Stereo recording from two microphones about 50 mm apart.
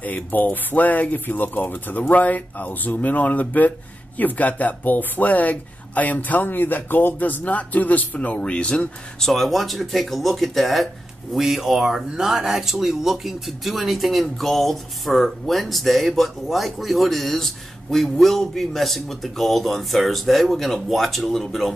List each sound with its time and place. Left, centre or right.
0.0 s speech: left
9.2 s speech: centre